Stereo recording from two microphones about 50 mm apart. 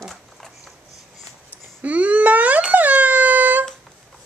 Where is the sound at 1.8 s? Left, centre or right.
Right.